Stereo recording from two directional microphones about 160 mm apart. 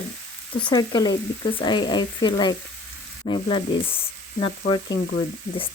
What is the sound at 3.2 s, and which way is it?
Sizzle, 35° left (ahead or behind).